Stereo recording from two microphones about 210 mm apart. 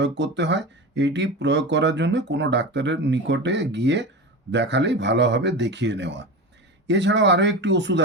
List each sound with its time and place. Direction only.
0.0 s speech: 55° right (ahead or behind)